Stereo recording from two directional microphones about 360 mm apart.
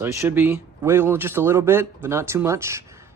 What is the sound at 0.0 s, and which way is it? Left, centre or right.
Speech, centre.